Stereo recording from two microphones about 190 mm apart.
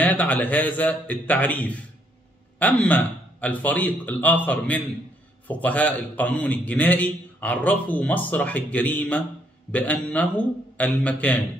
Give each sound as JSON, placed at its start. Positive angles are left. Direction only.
{"t": 0.0, "sound": "a man's voice", "side_deg": 10}